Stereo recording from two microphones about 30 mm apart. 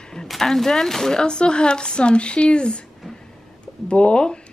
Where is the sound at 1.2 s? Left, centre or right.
Left.